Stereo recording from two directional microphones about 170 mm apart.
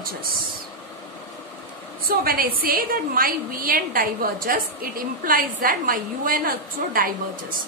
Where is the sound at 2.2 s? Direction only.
60° right (ahead or behind).